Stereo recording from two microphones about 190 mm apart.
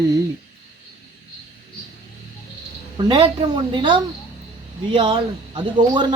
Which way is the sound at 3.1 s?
25° right (ahead or behind).